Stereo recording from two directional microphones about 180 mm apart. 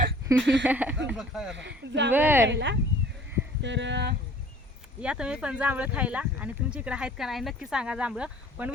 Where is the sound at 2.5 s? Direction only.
75° right (ahead or behind).